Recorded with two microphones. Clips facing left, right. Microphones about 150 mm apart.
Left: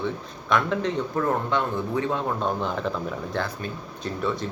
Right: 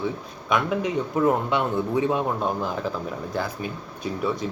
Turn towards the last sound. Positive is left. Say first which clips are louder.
# right 1 dB
turn(degrees=-5)  # may be behind; listen again after turning